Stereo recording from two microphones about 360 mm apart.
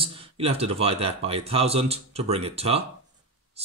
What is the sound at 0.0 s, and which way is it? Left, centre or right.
Speech, centre.